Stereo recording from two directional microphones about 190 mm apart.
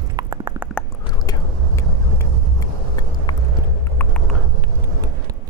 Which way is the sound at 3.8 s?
10° left (ahead or behind).